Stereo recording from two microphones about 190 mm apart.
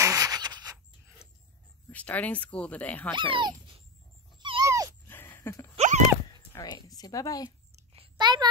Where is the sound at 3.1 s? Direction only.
25° right (ahead or behind).